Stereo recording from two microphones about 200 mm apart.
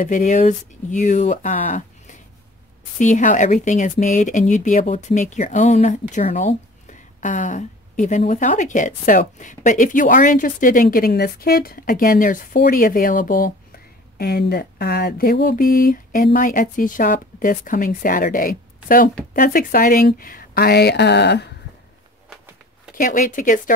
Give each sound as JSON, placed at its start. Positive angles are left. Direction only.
{"t": 0.0, "sound": "speech", "side_deg": 40}
{"t": 22.9, "sound": "speech", "side_deg": 40}